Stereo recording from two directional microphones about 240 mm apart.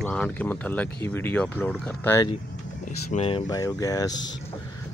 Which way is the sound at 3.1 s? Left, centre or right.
Left.